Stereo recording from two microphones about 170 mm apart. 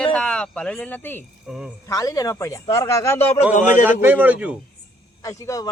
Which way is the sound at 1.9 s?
20° left (ahead or behind).